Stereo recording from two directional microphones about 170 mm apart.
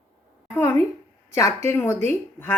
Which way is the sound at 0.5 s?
15° left (ahead or behind).